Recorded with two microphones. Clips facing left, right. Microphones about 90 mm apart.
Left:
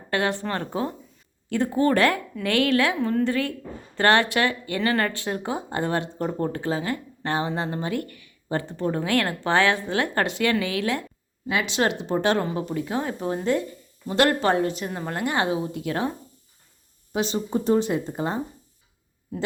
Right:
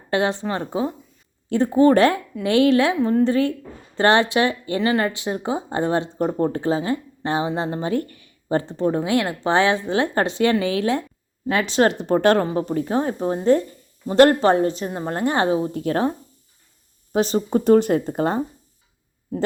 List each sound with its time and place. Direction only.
0.1 s speech: 25° right (ahead or behind)
1.5 s speech: 30° right (ahead or behind); by 12.5 s 50° right (ahead or behind)
12.5 s a woman's voice: 40° right (ahead or behind)
17.5 s speech: 60° right (ahead or behind)